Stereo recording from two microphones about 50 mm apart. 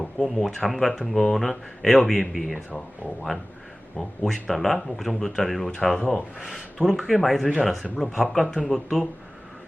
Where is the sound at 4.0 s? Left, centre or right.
Centre.